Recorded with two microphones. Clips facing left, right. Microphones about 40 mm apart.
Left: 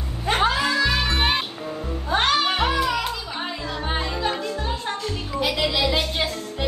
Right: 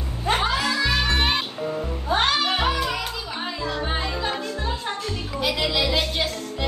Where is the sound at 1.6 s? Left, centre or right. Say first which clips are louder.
Right 4 dB; right.